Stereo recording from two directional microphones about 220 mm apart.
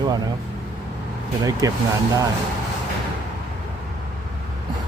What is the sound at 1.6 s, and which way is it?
Speech, 15° right (ahead or behind).